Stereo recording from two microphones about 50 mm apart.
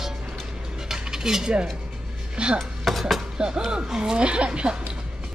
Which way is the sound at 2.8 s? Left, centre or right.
Centre.